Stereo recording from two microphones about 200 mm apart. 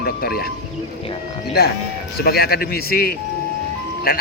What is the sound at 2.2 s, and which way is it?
Speech, 50° left (ahead or behind).